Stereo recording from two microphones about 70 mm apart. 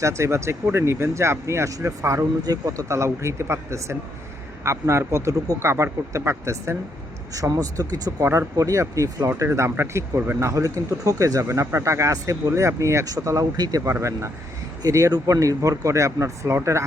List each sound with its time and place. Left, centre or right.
0.0 s speech: right
2.4 s speech: right
7.3 s speech: right
8.2 s speech: right
10.5 s speech: right
13.6 s speech: right
14.8 s speech: right